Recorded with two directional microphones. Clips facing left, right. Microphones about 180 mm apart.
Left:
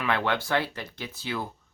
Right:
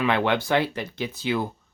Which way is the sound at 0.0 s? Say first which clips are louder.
Right 5 dB; 20° right (ahead or behind).